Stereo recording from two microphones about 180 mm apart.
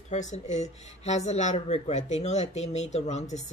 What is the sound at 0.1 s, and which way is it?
Speech, 40° left (ahead or behind).